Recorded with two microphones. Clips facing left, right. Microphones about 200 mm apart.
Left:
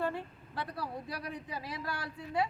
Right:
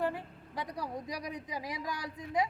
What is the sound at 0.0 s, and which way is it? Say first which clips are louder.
A man's voice: right 1 dB; 15° right (ahead or behind).